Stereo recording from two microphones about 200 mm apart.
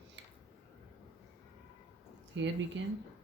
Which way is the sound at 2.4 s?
65° right (ahead or behind).